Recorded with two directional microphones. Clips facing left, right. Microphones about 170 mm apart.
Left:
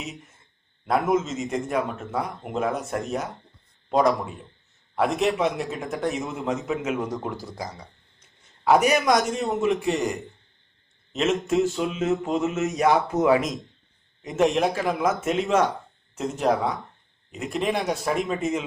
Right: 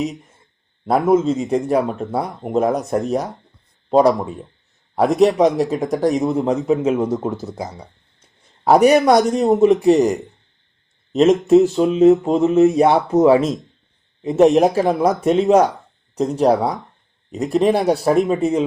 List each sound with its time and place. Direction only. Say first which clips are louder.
0.0 s a man's voice: right 13 dB; 40° right (ahead or behind)